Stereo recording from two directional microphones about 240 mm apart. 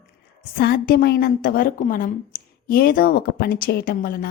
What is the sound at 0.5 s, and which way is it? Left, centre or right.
A woman's voice, left.